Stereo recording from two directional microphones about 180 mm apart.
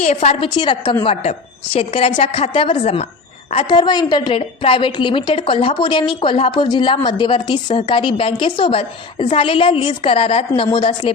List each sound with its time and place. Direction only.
0.0 s a woman's voice: 40° left (ahead or behind)
0.5 s a woman's voice: 25° left (ahead or behind)
1.0 s a woman's voice: 35° left (ahead or behind)